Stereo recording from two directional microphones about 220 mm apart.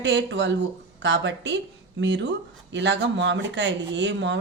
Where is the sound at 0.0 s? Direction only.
55° right (ahead or behind).